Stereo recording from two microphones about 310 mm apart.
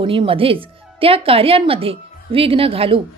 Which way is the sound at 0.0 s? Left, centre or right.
Centre.